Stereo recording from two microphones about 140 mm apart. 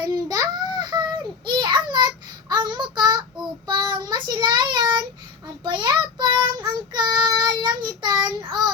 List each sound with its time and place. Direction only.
0.0 s child singing: 30° right (ahead or behind)